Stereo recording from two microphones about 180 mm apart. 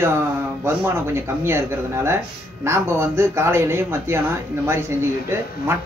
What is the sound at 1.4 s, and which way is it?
Speech, 15° right (ahead or behind).